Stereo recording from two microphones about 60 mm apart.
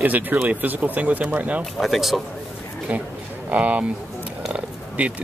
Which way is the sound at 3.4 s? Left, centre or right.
Right.